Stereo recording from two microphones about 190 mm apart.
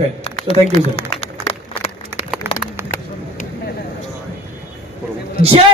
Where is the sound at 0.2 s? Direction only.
30° left (ahead or behind).